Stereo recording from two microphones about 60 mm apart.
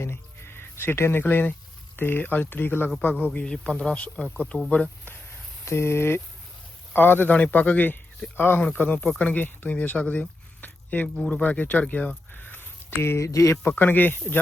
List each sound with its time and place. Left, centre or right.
0.0 s music: left
1.2 s speech: left
3.4 s speech: centre
5.6 s speech: left
13.2 s speech: left
13.6 s speech: left